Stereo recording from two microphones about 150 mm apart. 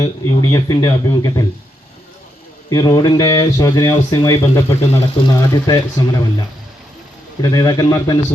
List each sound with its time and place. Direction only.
0.0 s speech: 20° left (ahead or behind)
2.6 s speech: 25° left (ahead or behind)
7.4 s speech: 20° left (ahead or behind)